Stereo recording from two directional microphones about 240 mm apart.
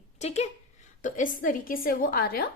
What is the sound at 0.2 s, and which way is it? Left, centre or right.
A woman's voice, left.